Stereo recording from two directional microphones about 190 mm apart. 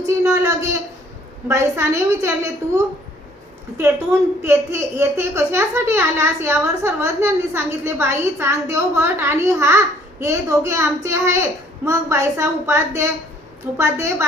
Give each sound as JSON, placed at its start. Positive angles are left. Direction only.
{"t": 0.0, "sound": "a child's voice", "side_deg": -15}
{"t": 4.4, "sound": "a child's voice", "side_deg": -15}